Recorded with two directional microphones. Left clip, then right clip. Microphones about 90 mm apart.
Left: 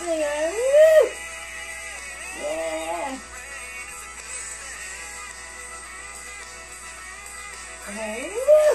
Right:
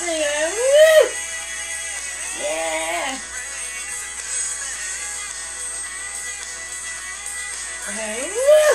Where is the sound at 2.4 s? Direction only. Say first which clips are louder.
Right 4 dB; 25° right (ahead or behind).